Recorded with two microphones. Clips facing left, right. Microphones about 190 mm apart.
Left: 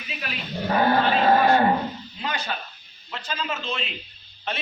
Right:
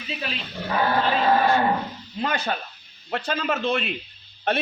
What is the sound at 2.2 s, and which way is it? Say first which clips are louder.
A man's voice: right 4 dB; 50° right (ahead or behind).